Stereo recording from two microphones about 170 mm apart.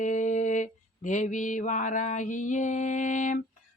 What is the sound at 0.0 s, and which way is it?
Mantra, 45° left (ahead or behind).